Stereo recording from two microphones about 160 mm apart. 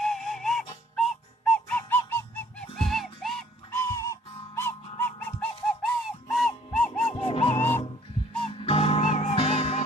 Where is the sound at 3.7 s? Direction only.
15° left (ahead or behind).